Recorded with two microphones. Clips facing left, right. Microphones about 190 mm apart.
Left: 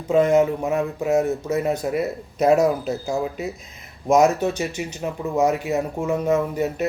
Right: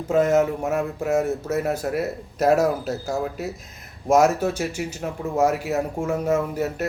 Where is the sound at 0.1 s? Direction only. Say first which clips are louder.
Left 2 dB; 5° right (ahead or behind).